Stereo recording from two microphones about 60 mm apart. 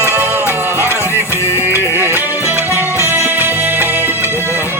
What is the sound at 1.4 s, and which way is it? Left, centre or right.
Music, left.